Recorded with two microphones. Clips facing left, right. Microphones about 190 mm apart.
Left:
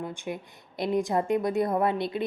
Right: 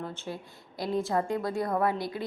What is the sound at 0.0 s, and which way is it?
A woman's voice, 15° left (ahead or behind).